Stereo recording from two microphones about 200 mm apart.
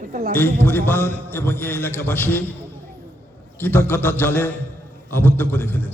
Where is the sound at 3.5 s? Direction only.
10° left (ahead or behind).